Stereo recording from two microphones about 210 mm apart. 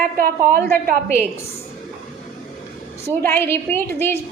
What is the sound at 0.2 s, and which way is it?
Speech, 45° right (ahead or behind).